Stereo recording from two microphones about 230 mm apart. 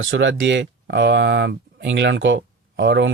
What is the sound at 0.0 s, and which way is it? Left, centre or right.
Speech, right.